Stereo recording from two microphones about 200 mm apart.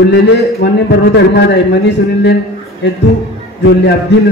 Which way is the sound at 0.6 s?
55° left (ahead or behind).